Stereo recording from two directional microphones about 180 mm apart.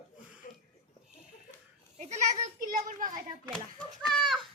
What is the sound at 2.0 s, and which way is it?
Children playing, 40° right (ahead or behind).